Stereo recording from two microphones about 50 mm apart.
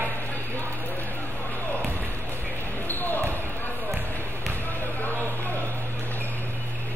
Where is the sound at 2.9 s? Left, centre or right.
Left.